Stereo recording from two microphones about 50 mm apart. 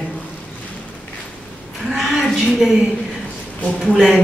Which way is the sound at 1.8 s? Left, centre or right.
Centre.